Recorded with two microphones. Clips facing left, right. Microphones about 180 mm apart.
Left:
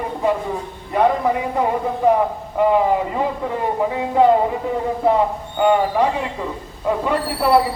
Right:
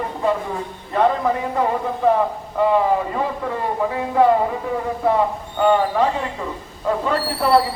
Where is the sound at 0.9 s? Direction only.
15° left (ahead or behind).